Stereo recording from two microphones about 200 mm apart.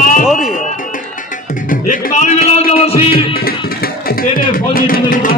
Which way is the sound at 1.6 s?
40° left (ahead or behind).